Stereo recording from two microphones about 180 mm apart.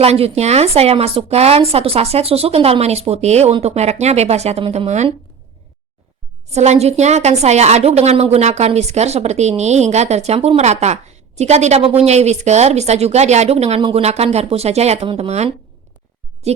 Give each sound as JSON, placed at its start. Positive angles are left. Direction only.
{"t": 0.0, "sound": "a woman's voice", "side_deg": -35}
{"t": 6.5, "sound": "a woman's voice", "side_deg": -40}